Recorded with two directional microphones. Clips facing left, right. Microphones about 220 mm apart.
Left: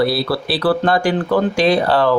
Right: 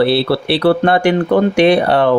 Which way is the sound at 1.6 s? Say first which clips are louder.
Right 5 dB; 65° right (ahead or behind).